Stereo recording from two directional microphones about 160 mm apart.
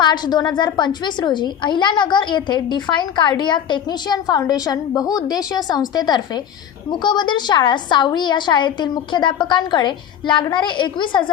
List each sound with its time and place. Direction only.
0.0 s a woman's voice: 25° left (ahead or behind)